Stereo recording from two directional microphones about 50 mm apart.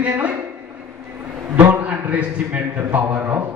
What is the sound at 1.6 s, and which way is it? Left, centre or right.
A man's voice, right.